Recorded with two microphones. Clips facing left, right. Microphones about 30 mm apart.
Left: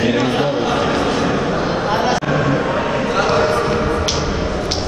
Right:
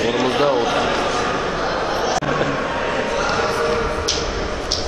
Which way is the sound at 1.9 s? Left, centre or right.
Left.